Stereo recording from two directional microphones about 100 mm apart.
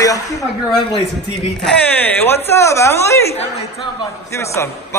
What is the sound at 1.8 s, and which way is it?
Speech, 15° left (ahead or behind).